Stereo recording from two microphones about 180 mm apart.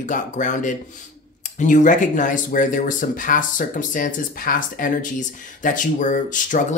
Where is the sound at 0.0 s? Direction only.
45° left (ahead or behind).